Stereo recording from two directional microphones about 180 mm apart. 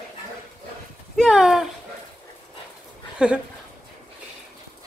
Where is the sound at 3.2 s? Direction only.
5° right (ahead or behind).